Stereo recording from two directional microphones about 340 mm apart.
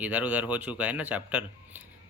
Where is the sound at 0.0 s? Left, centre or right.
Centre.